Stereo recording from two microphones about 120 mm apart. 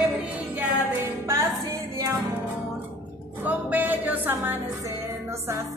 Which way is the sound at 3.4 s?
15° right (ahead or behind).